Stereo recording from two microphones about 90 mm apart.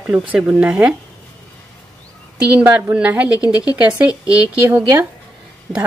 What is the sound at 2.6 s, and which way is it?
A woman's voice, 20° right (ahead or behind).